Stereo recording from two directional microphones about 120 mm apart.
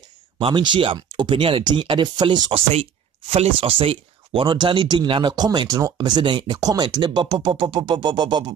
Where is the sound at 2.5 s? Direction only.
60° right (ahead or behind); by 8.5 s 40° right (ahead or behind).